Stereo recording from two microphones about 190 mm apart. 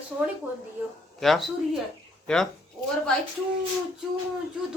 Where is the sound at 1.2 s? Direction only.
Centre (ahead or behind).